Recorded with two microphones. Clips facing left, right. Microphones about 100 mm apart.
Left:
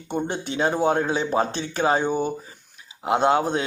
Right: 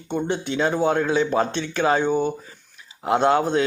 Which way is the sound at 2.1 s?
10° left (ahead or behind).